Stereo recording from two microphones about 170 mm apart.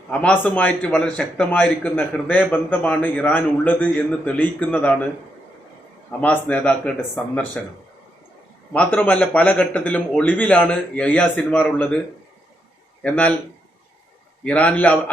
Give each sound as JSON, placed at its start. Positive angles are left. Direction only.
{"t": 0.1, "sound": "a man's voice", "side_deg": 5}
{"t": 6.1, "sound": "a man's voice", "side_deg": 10}
{"t": 13.0, "sound": "a man's voice", "side_deg": 5}
{"t": 14.4, "sound": "a man's voice", "side_deg": 10}